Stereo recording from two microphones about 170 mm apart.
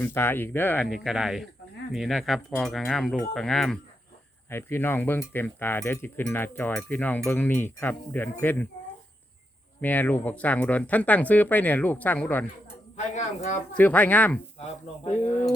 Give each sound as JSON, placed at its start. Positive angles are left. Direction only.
{"t": 0.0, "sound": "speech", "side_deg": 15}
{"t": 0.9, "sound": "wind chime", "side_deg": 0}
{"t": 4.4, "sound": "speech", "side_deg": 15}
{"t": 9.8, "sound": "speech", "side_deg": 10}
{"t": 13.0, "sound": "speech", "side_deg": 45}
{"t": 13.7, "sound": "speech", "side_deg": 10}